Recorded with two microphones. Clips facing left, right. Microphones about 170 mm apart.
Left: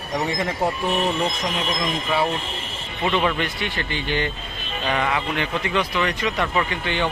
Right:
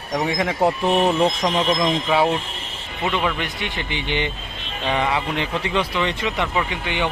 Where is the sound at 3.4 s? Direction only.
20° right (ahead or behind).